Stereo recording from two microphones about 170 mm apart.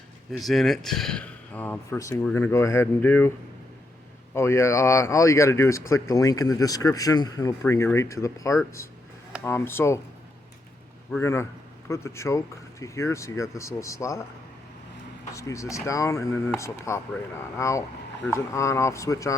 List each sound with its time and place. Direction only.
0.3 s speech: centre (ahead or behind)
4.4 s speech: 15° left (ahead or behind)
11.2 s speech: 15° left (ahead or behind)
15.3 s speech: 15° left (ahead or behind)